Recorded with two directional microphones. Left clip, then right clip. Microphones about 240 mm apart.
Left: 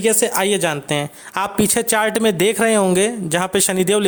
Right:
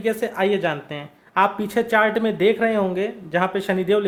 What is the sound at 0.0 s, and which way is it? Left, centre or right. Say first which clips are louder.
Speech: left 4 dB; left.